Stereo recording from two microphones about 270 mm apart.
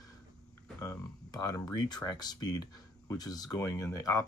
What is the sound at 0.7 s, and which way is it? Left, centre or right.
Speech, centre.